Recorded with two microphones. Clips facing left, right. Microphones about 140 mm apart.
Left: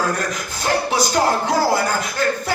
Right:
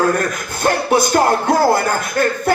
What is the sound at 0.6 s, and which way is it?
Music, 55° right (ahead or behind).